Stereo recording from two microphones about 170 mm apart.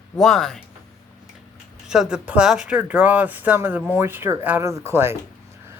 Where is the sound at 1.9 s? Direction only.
5° right (ahead or behind).